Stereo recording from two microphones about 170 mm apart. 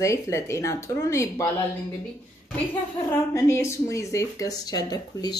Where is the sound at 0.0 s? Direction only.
15° left (ahead or behind).